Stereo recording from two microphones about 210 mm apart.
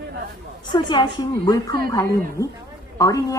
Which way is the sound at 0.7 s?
20° left (ahead or behind).